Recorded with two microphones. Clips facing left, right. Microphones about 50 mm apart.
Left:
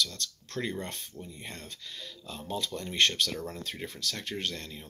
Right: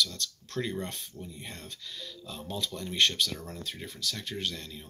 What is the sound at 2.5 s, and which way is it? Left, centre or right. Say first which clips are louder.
Speech: left 1 dB; left.